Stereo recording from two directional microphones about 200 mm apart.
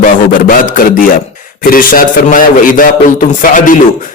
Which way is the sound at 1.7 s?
45° left (ahead or behind).